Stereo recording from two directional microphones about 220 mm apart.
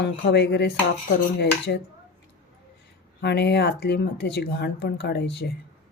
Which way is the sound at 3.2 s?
50° left (ahead or behind).